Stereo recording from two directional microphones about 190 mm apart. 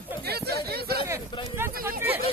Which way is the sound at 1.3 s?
25° left (ahead or behind).